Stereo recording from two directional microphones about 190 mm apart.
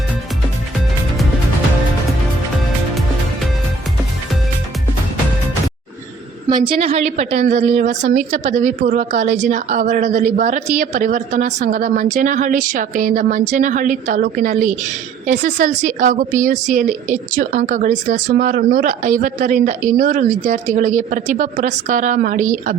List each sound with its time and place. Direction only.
6.5 s a woman's voice: 25° right (ahead or behind); by 22.7 s 40° right (ahead or behind)